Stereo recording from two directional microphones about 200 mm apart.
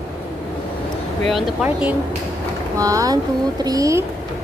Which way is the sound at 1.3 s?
Centre (ahead or behind).